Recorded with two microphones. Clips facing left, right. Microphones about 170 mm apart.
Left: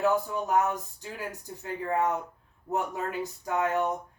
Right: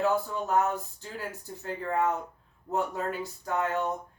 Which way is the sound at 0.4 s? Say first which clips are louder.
Right 1 dB; 15° left (ahead or behind).